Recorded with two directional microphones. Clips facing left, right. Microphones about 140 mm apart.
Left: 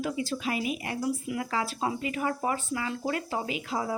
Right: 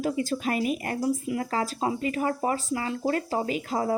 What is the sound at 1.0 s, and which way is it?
Speech, 35° right (ahead or behind).